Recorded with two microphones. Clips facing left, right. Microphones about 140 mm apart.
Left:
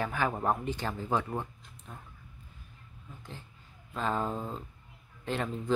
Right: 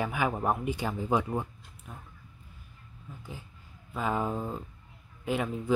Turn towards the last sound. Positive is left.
turn(degrees=-5)  # may be behind; listen again after turning